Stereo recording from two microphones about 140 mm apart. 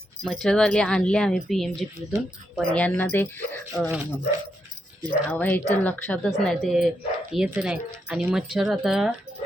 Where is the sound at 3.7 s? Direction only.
Centre (ahead or behind).